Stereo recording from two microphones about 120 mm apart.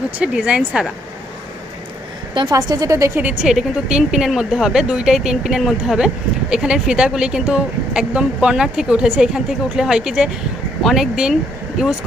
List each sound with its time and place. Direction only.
0.2 s speech: 10° right (ahead or behind)
2.3 s a woman's voice: 35° right (ahead or behind)
3.4 s speech: 5° right (ahead or behind)